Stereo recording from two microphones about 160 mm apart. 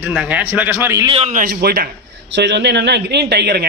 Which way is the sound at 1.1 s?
40° right (ahead or behind).